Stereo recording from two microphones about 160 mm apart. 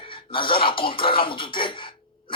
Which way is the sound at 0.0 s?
35° left (ahead or behind).